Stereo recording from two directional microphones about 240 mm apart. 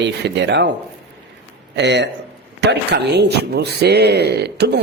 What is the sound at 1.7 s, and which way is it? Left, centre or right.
A man's voice, right.